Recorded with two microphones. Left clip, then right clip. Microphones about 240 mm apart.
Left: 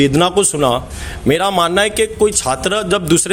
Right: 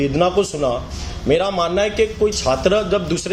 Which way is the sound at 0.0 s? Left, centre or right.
Left.